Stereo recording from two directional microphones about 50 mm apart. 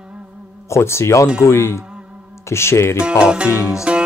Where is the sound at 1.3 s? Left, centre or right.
Left.